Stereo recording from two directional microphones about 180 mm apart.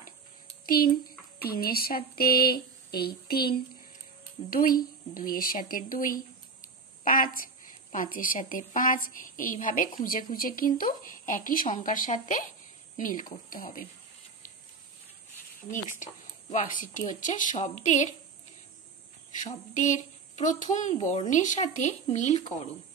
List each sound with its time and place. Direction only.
0.7 s a woman's voice: 55° left (ahead or behind)
16.0 s speech: 45° left (ahead or behind)
19.3 s speech: 45° left (ahead or behind)